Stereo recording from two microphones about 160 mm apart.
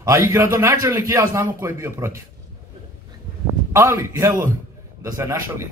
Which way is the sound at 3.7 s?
15° right (ahead or behind).